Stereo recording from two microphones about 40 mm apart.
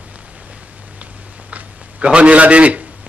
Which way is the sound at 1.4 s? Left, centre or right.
Right.